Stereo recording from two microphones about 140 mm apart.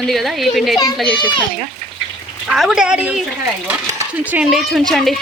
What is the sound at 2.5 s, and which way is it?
A woman's voice, 5° right (ahead or behind).